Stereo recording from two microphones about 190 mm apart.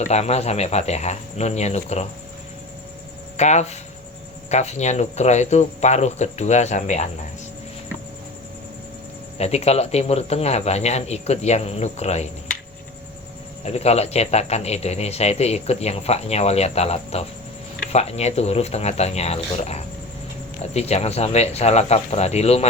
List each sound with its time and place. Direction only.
0.1 s speech: 35° left (ahead or behind)
3.3 s speech: 35° left (ahead or behind)
9.4 s speech: 35° left (ahead or behind)
13.7 s speech: 35° left (ahead or behind)